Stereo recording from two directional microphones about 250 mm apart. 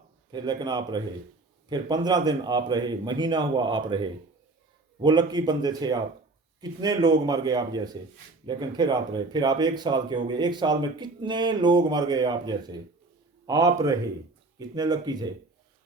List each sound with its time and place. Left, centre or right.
0.3 s speech: centre